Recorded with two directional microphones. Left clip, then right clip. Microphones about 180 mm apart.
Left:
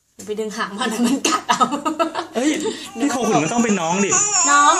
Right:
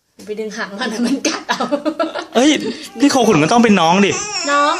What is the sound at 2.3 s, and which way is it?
Speech, 40° right (ahead or behind).